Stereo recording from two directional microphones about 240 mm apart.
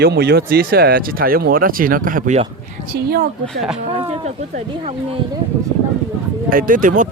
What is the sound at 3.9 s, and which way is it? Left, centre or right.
Speech, right.